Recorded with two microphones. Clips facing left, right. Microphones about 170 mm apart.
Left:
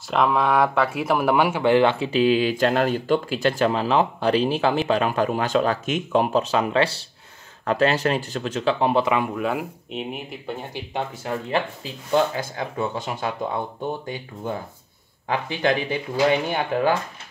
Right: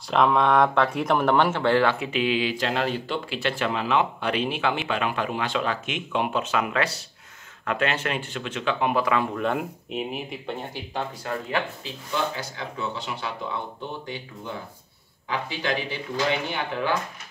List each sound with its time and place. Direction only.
0.1 s speech: centre (ahead or behind); by 9.1 s 30° left (ahead or behind)
9.3 s speech: 5° left (ahead or behind)
10.7 s speech: 20° left (ahead or behind)
12.1 s speech: 50° left (ahead or behind)